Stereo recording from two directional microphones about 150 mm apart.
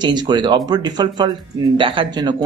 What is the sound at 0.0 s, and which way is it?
Speech, 30° right (ahead or behind).